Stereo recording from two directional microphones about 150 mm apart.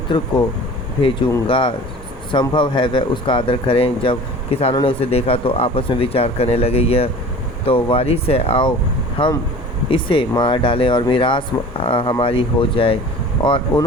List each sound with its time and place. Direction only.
0.1 s speech: 30° left (ahead or behind)
1.5 s speech: 35° left (ahead or behind)